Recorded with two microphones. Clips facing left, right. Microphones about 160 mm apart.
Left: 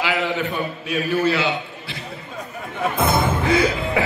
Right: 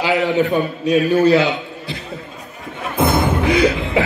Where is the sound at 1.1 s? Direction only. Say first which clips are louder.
Right 5 dB; 40° right (ahead or behind).